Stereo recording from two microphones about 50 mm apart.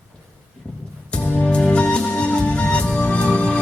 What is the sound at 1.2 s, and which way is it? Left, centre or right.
Music, left.